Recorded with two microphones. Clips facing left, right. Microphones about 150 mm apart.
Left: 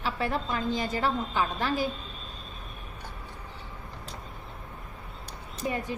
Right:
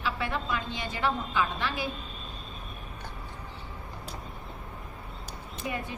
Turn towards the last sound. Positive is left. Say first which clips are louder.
# left 3 dB
turn(degrees=40)  # may be behind; listen again after turning